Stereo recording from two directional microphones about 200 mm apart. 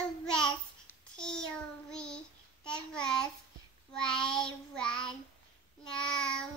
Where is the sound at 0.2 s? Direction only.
5° left (ahead or behind).